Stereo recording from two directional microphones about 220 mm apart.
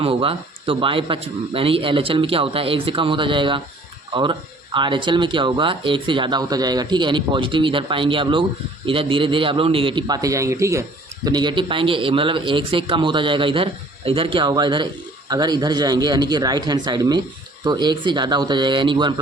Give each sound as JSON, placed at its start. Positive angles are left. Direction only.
{"t": 0.0, "sound": "speech", "side_deg": -25}